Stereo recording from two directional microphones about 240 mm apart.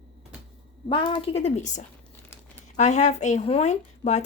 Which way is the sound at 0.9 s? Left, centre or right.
Centre.